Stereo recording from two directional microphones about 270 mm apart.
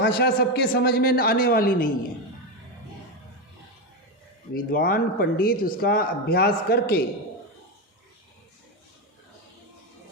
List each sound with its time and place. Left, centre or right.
0.0 s speech: left
4.5 s speech: left